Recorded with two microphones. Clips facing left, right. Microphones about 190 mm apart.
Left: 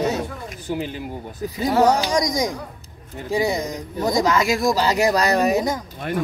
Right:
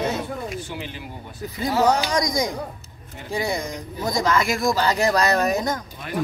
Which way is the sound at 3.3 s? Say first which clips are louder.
Left 4 dB; 15° left (ahead or behind).